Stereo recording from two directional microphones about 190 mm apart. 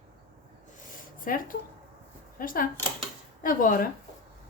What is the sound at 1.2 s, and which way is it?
Speech, 45° left (ahead or behind).